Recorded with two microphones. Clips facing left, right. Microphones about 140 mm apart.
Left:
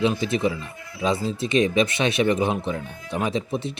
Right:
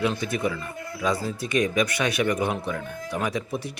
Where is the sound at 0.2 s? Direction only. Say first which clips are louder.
Left 3 dB; 25° left (ahead or behind).